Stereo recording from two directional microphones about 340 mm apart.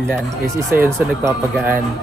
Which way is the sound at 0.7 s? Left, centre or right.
Centre.